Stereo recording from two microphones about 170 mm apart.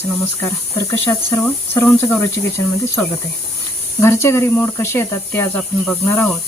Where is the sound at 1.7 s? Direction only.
15° left (ahead or behind).